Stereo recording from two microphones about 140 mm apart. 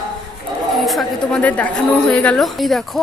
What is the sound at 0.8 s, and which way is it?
A woman's voice, centre (ahead or behind).